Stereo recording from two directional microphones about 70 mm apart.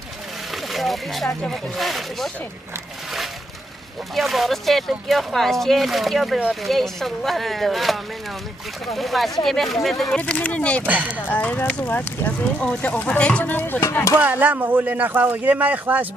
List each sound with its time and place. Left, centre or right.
0.7 s speech: centre
4.1 s speech: centre
10.0 s speech: centre
10.9 s speech: right
11.2 s speech: left
11.8 s speech: left
12.5 s speech: centre
14.2 s speech: right